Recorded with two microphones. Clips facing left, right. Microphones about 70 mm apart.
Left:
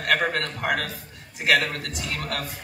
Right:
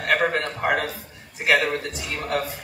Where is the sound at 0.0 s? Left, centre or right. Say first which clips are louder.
Right 2 dB; centre.